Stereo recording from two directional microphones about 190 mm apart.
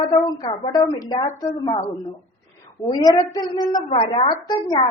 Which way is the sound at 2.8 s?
20° left (ahead or behind).